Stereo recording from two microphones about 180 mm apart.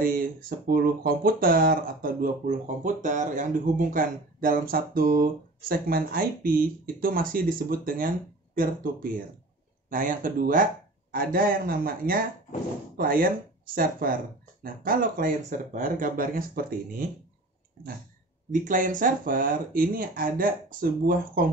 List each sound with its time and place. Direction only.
0.0 s speech: 50° right (ahead or behind)
9.8 s speech: 50° right (ahead or behind)
18.5 s speech: 45° right (ahead or behind)